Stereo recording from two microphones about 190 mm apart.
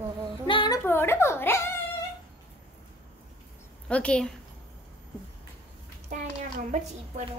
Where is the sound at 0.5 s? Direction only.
25° left (ahead or behind).